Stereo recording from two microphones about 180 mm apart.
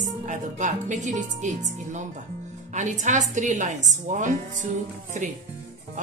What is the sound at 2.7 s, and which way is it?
Speech, 45° right (ahead or behind).